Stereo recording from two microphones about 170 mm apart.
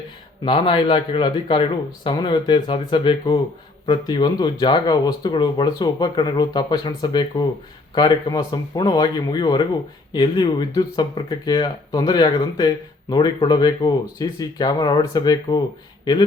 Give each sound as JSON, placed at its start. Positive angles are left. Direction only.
{"t": 0.4, "sound": "speech", "side_deg": 30}